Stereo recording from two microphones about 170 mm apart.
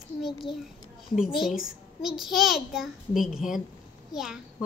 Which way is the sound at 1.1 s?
5° right (ahead or behind).